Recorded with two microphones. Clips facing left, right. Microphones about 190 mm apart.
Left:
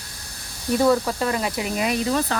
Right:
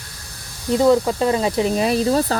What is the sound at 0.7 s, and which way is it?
Speech, 20° right (ahead or behind).